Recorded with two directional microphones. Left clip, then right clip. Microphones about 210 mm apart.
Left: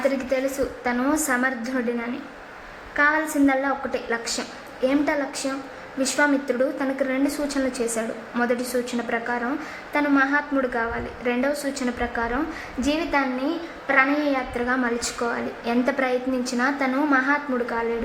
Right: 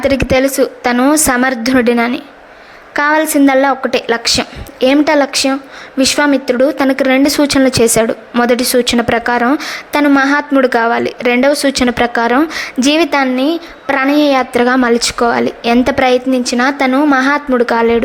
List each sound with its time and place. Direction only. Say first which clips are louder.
0.1 s speech: right 13 dB; 40° right (ahead or behind)